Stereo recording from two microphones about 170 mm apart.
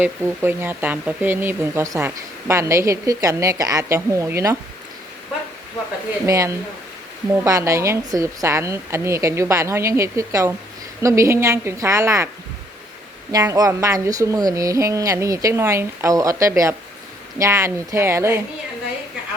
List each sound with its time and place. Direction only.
0.0 s speech: 10° right (ahead or behind)
6.2 s speech: 20° right (ahead or behind)
13.3 s speech: 20° right (ahead or behind)